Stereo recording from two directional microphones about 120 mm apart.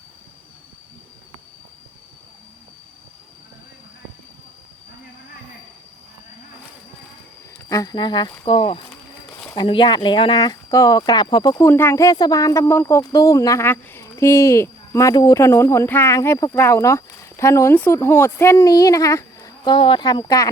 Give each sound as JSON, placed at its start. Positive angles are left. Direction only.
{"t": 7.7, "sound": "speech", "side_deg": 30}
{"t": 11.5, "sound": "speech", "side_deg": 20}
{"t": 19.7, "sound": "speech", "side_deg": 45}